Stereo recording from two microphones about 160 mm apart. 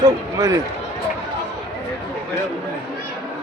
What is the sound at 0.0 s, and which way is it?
Speech, 20° right (ahead or behind).